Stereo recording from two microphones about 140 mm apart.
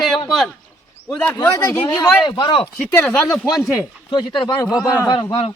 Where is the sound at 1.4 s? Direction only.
20° left (ahead or behind).